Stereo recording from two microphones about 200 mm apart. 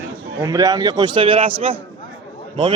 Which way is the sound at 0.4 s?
15° right (ahead or behind).